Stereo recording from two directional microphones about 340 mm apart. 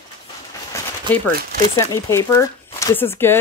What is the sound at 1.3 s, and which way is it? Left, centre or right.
Speech, right.